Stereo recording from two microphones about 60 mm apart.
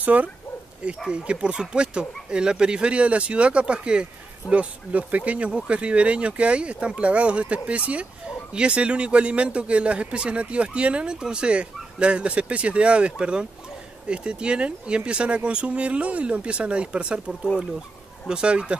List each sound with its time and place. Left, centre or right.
0.0 s speech: right
0.8 s a man's voice: centre